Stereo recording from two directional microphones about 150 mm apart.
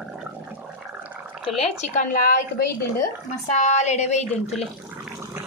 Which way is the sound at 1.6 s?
55° left (ahead or behind).